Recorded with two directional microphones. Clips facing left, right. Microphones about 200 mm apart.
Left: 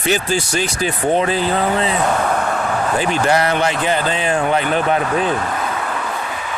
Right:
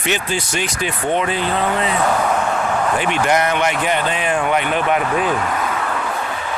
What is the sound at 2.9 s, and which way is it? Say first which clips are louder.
Speech: left 3 dB; 35° left (ahead or behind).